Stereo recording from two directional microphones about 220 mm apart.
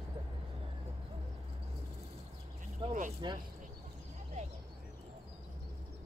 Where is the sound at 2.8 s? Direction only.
20° right (ahead or behind).